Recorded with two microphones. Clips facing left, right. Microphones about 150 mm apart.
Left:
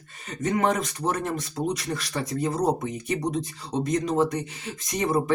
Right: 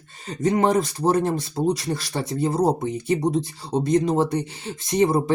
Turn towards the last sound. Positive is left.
turn(degrees=-30)  # may be behind; listen again after turning